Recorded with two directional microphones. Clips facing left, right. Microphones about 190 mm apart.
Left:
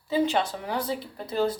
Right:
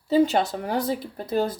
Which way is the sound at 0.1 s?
40° right (ahead or behind).